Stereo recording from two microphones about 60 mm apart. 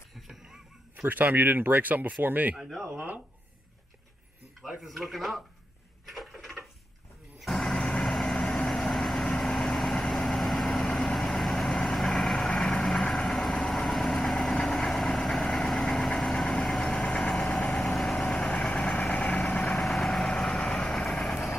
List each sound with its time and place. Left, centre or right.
0.3 s music: centre
1.0 s speech: right
4.6 s speech: centre
6.1 s a sound: centre
7.5 s vehicle: centre